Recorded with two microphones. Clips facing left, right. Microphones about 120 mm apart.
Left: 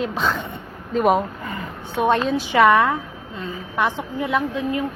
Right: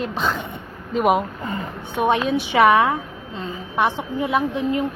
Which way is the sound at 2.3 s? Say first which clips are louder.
Right 1 dB; 20° right (ahead or behind).